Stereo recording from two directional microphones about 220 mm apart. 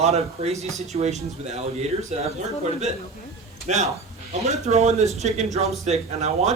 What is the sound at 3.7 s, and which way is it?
Speech, 35° right (ahead or behind).